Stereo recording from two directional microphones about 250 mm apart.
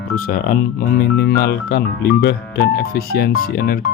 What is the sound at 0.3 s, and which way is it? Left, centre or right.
Speech, left.